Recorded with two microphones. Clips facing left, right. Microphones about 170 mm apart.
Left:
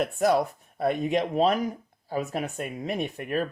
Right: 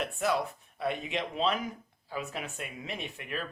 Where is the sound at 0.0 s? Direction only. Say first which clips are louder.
Left 7 dB; 40° left (ahead or behind).